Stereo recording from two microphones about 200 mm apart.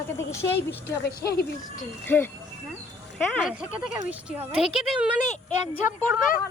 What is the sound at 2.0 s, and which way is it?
A woman's voice, 10° left (ahead or behind).